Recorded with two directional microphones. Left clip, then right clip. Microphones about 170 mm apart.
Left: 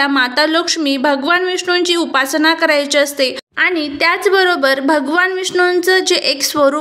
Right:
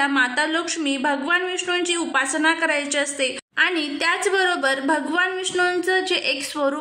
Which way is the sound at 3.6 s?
15° left (ahead or behind).